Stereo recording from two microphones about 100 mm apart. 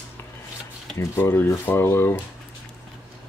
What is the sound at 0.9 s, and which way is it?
Speech, 25° left (ahead or behind).